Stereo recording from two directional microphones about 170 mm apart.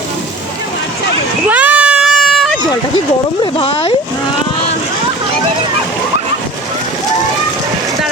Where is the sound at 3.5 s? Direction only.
30° left (ahead or behind).